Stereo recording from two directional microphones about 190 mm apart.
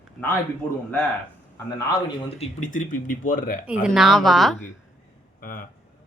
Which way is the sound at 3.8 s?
Centre (ahead or behind).